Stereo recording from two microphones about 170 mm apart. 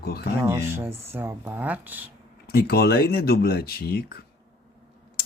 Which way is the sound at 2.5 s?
65° left (ahead or behind).